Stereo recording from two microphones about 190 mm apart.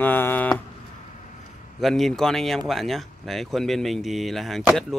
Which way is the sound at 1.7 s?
Centre (ahead or behind).